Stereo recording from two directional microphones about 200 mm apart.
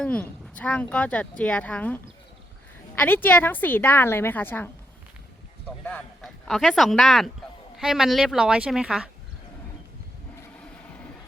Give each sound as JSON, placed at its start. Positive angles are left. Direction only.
{"t": 0.0, "sound": "speech", "side_deg": 5}
{"t": 5.8, "sound": "a woman's voice", "side_deg": 5}